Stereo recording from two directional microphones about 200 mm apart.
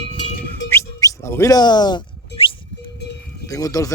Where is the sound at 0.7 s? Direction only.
15° left (ahead or behind).